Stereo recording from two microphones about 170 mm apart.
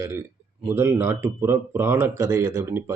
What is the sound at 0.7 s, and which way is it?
A man's voice, 10° right (ahead or behind).